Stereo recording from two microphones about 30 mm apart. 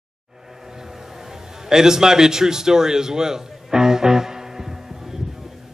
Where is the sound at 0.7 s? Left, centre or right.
Centre.